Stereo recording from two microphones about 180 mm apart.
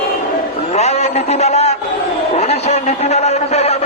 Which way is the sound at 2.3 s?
35° left (ahead or behind).